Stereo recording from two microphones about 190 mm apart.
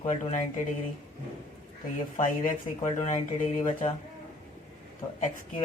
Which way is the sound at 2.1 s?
45° left (ahead or behind).